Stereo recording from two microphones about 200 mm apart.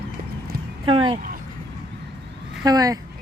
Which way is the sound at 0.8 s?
25° right (ahead or behind).